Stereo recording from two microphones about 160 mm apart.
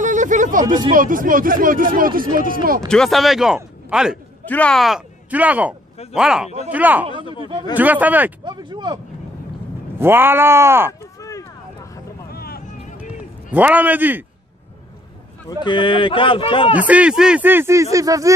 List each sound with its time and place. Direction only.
0.0 s speech: 50° right (ahead or behind)
2.9 s speech: centre (ahead or behind)
4.5 s speech: 5° left (ahead or behind); by 8.3 s 10° right (ahead or behind)
8.5 s speech: 30° right (ahead or behind)
9.9 s speech: 15° right (ahead or behind)
10.9 s a sound: 20° left (ahead or behind)
12.3 s vehicle: 75° left (ahead or behind)
13.5 s speech: 10° right (ahead or behind)
15.6 s speech: 30° left (ahead or behind)
16.7 s speech: 10° right (ahead or behind)